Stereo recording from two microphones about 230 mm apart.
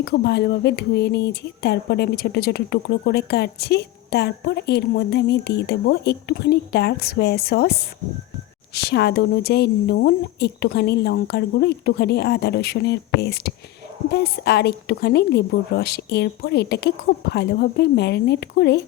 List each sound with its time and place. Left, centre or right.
0.0 s speech: left